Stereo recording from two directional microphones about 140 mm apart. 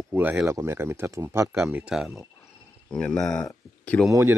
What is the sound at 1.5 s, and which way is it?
Speech, 5° right (ahead or behind).